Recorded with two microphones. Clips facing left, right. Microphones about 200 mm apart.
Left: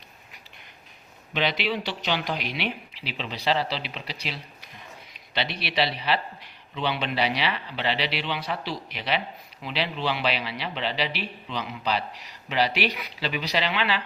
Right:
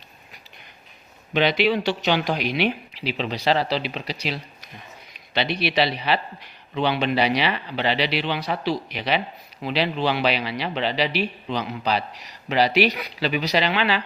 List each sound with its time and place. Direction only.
1.3 s a man's voice: 55° right (ahead or behind)
6.7 s a man's voice: 50° right (ahead or behind)